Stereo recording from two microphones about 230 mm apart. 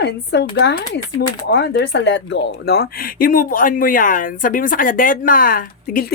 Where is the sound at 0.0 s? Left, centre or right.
Left.